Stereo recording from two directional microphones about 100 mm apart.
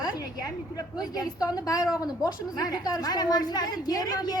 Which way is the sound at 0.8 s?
40° left (ahead or behind).